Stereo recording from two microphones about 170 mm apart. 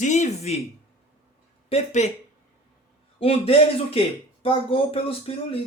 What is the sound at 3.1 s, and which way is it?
Speech, 35° left (ahead or behind).